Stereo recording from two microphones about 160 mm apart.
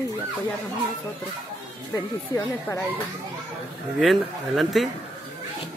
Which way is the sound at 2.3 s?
10° left (ahead or behind).